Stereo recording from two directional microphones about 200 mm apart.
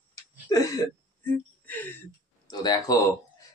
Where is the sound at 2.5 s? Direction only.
20° left (ahead or behind).